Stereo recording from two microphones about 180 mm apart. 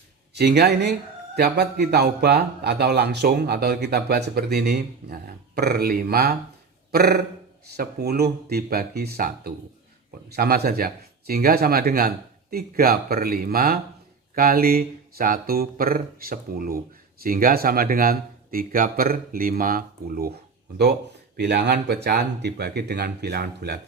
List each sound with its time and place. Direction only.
0.3 s speech: 65° right (ahead or behind)
21.3 s speech: 65° right (ahead or behind)